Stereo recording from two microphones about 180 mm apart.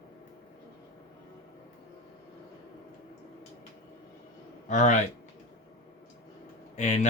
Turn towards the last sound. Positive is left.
turn(degrees=40)  # may be behind; listen again after turning